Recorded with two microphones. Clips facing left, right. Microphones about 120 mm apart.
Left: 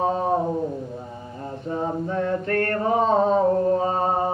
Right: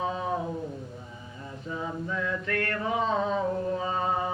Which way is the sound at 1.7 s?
45° left (ahead or behind).